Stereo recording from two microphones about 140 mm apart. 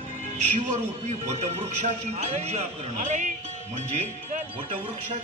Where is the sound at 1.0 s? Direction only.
55° right (ahead or behind).